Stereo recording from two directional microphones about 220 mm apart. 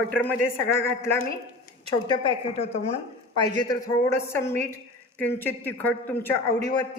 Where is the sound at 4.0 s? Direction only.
10° left (ahead or behind).